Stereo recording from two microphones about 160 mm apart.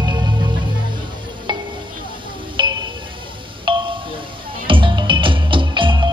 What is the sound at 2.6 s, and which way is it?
Music, 30° right (ahead or behind).